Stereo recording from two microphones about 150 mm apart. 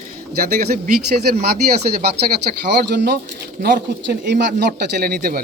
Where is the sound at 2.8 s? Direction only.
90° right.